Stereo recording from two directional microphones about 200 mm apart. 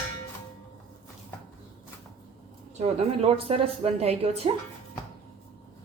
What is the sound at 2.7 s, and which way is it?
A woman's voice, 30° right (ahead or behind).